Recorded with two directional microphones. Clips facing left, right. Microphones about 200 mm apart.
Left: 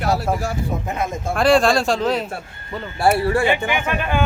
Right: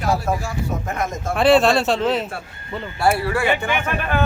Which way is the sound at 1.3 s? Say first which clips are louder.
Right 1 dB; 5° right (ahead or behind).